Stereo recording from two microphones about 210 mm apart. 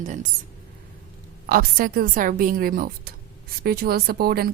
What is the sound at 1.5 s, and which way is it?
Speech, 45° right (ahead or behind).